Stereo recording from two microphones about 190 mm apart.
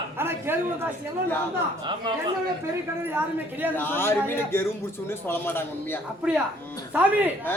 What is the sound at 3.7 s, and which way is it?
A man's voice, 10° left (ahead or behind).